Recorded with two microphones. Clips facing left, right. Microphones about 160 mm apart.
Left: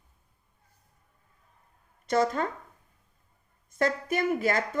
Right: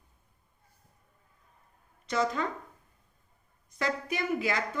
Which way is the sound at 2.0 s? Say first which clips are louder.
Left 4 dB; 50° left (ahead or behind).